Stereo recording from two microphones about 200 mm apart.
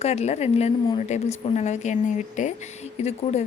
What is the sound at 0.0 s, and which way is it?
A woman's voice, 30° left (ahead or behind).